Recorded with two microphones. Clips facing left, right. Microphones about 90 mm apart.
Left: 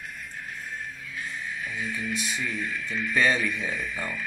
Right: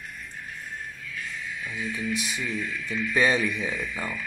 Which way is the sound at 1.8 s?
35° left (ahead or behind).